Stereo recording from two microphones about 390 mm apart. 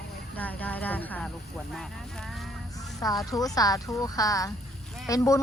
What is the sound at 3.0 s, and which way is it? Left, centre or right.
A woman's voice, centre.